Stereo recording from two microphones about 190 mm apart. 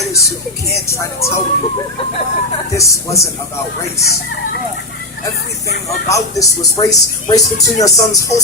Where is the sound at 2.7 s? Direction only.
15° left (ahead or behind).